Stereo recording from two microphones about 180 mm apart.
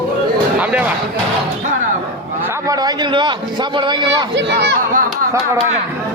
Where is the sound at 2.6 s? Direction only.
20° right (ahead or behind).